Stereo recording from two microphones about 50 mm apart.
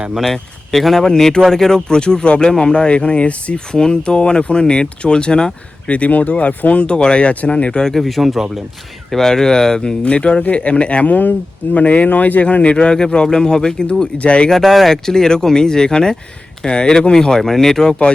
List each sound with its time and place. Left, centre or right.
0.2 s speech: centre
5.9 s speech: left
7.9 s speech: centre
9.0 s speech: centre; by 12.7 s left
12.7 s speech: centre
14.5 s speech: centre